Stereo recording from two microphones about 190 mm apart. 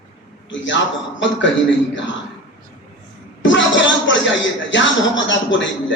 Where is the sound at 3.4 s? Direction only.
75° left (ahead or behind).